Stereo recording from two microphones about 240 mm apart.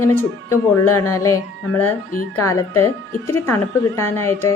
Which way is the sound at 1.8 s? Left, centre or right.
Left.